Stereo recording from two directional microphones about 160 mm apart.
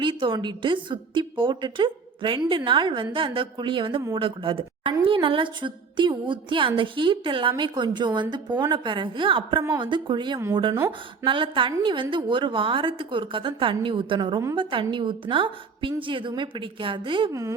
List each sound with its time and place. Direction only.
0.0 s a woman's voice: 30° right (ahead or behind)
10.8 s speech: 15° right (ahead or behind)
11.3 s a woman's voice: 30° right (ahead or behind)